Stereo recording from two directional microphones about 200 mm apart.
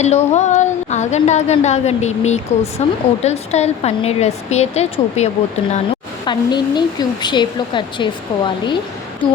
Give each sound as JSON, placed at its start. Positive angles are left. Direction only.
{"t": 0.0, "sound": "a woman's voice", "side_deg": 35}
{"t": 6.2, "sound": "a woman's voice", "side_deg": 20}